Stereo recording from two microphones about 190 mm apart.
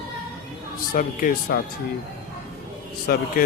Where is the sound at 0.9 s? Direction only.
45° left (ahead or behind).